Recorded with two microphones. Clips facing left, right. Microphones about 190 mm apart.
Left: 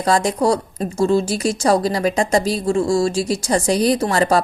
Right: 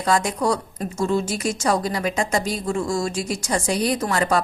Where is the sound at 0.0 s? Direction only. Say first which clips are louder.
Left 4 dB; 35° left (ahead or behind).